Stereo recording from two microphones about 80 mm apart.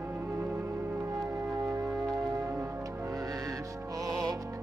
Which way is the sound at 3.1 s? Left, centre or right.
Right.